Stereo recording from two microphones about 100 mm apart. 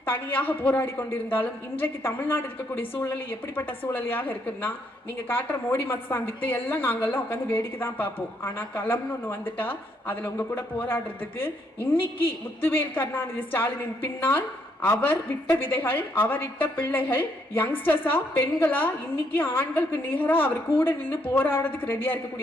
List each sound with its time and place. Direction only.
0.0 s a woman's voice: 20° left (ahead or behind)